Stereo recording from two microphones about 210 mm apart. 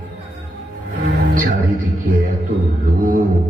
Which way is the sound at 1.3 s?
40° right (ahead or behind).